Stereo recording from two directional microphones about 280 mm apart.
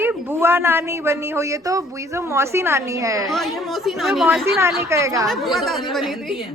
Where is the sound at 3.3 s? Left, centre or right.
Centre.